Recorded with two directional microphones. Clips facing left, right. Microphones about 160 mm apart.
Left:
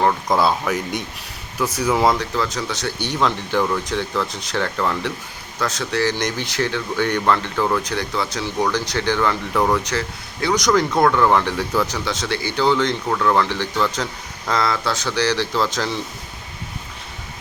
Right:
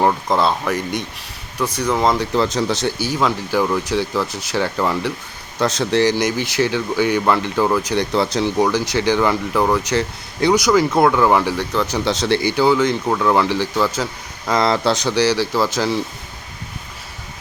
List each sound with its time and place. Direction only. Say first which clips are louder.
0.0 s speech: right 1 dB; 10° right (ahead or behind)
0.3 s speech: right 1 dB; centre (ahead or behind)
2.3 s speech: right 6 dB; 30° right (ahead or behind)
3.0 s speech: right 2 dB; 5° right (ahead or behind)
5.5 s speech: right 5 dB; 25° right (ahead or behind)
6.1 s speech: right 5 dB; 5° right (ahead or behind)
7.9 s speech: right 6 dB; 30° right (ahead or behind)
8.6 s speech: right 3 dB; 5° right (ahead or behind)
12.0 s speech: right 6 dB; 30° right (ahead or behind)
12.5 s speech: right 1 dB; 10° right (ahead or behind)
14.5 s speech: right 5 dB; 25° right (ahead or behind)
14.9 s speech: right 4 dB; 15° right (ahead or behind)